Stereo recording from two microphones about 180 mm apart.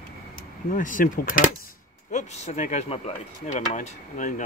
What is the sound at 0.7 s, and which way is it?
Speech, 50° left (ahead or behind).